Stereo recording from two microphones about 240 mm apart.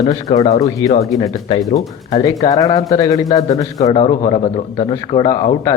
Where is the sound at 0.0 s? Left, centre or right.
Left.